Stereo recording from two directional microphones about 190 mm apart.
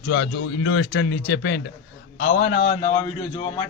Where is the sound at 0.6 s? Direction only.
70° left (ahead or behind).